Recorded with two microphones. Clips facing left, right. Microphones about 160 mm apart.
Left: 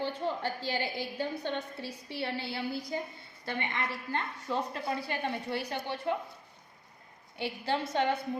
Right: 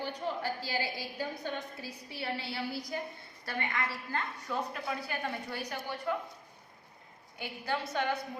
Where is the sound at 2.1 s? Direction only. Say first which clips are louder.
Left 2 dB; 30° left (ahead or behind).